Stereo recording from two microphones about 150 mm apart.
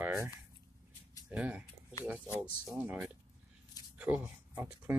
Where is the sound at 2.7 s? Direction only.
15° right (ahead or behind).